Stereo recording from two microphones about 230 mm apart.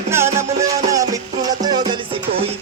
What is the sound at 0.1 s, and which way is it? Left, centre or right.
Music, centre.